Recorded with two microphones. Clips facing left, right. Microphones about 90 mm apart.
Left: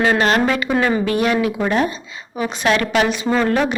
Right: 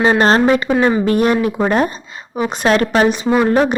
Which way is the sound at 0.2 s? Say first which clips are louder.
Right 4 dB; 30° right (ahead or behind).